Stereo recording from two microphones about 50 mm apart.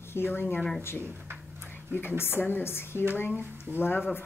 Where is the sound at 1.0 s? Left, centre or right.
Right.